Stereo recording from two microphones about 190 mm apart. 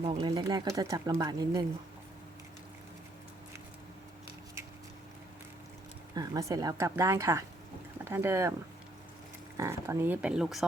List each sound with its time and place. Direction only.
0.0 s speech: 25° right (ahead or behind)
6.1 s a woman's voice: 20° right (ahead or behind)
9.6 s a woman's voice: 15° right (ahead or behind)